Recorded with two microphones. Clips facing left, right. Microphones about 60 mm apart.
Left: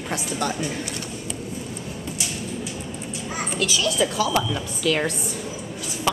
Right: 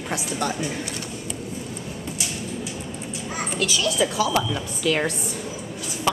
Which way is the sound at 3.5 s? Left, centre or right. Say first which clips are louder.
Even; centre.